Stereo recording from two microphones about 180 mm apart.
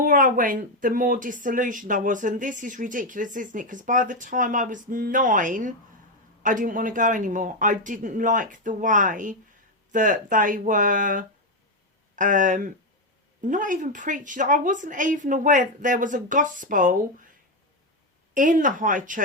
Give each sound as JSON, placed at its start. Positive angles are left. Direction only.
{"t": 0.0, "sound": "speech", "side_deg": -50}
{"t": 18.3, "sound": "speech", "side_deg": -45}